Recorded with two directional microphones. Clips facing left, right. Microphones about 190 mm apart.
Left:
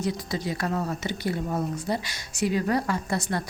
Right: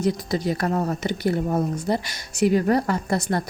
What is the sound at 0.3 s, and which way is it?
Speech, 45° right (ahead or behind).